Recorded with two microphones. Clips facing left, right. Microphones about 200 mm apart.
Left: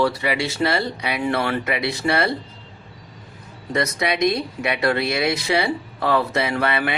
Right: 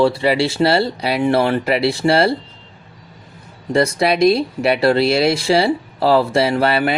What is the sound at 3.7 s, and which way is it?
Speech, 30° right (ahead or behind).